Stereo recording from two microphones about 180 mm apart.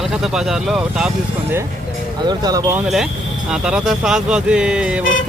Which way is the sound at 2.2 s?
20° right (ahead or behind).